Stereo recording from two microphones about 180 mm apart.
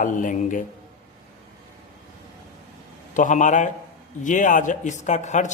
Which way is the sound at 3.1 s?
45° left (ahead or behind).